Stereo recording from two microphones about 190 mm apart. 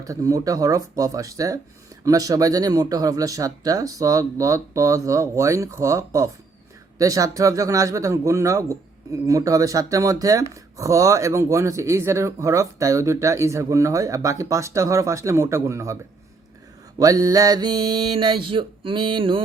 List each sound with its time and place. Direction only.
0.0 s speech: 15° right (ahead or behind)
17.0 s mantra: 20° right (ahead or behind)